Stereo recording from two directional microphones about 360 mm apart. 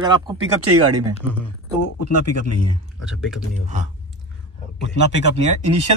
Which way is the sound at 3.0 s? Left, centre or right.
Centre.